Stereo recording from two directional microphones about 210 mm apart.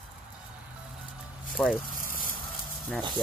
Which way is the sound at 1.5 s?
Centre (ahead or behind).